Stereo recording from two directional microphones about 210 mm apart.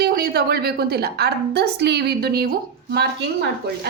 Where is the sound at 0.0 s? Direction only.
45° right (ahead or behind).